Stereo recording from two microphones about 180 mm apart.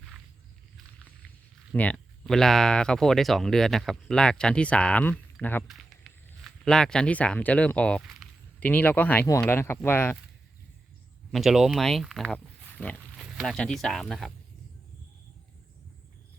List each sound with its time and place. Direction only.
1.7 s speech: 10° left (ahead or behind)
11.3 s speech: centre (ahead or behind)